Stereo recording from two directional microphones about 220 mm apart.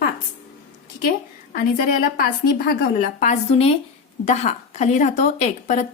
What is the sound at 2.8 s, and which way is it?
A woman's voice, 35° left (ahead or behind).